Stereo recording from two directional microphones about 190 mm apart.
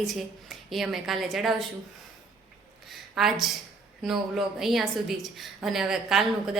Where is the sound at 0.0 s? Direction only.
Centre (ahead or behind).